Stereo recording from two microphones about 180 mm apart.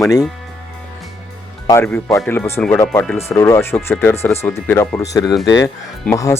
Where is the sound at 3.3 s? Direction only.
15° left (ahead or behind).